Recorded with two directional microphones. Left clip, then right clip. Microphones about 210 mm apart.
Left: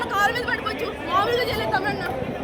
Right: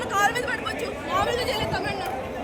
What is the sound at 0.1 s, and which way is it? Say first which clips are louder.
Chatter: even; 10° right (ahead or behind).